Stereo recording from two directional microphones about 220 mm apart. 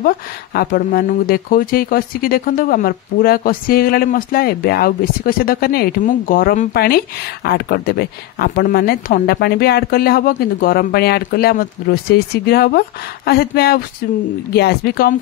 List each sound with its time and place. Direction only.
0.0 s speech: 40° left (ahead or behind)